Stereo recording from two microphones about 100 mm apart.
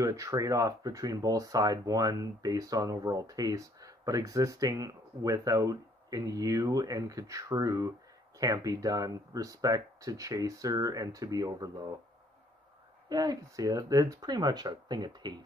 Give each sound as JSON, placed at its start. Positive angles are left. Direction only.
{"t": 0.0, "sound": "speech", "side_deg": -35}
{"t": 13.1, "sound": "speech", "side_deg": -40}